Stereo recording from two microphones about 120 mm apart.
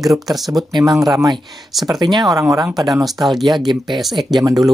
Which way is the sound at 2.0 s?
35° right (ahead or behind).